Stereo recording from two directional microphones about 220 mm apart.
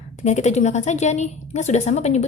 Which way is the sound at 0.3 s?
30° left (ahead or behind).